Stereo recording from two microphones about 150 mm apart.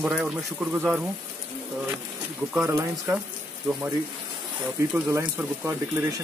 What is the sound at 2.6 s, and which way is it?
Speech, 15° right (ahead or behind).